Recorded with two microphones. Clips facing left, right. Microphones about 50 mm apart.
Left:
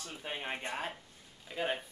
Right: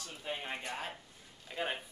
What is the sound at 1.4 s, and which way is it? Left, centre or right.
Speech, centre.